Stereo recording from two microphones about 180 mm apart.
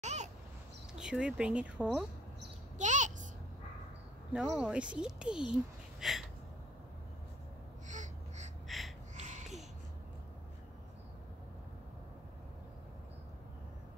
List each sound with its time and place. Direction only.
0.0 s babbling: 40° right (ahead or behind)
0.9 s speech: 5° right (ahead or behind)
2.8 s a sound: 45° right (ahead or behind)
4.3 s a child's voice: 5° right (ahead or behind)
7.9 s a sound: 45° right (ahead or behind)
8.6 s gasp: centre (ahead or behind)
9.2 s babbling: 40° right (ahead or behind)